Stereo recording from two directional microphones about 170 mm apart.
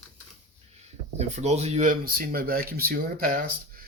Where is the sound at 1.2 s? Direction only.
40° right (ahead or behind).